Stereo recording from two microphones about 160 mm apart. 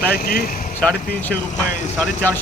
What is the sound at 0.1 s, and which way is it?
Speech, 70° left (ahead or behind).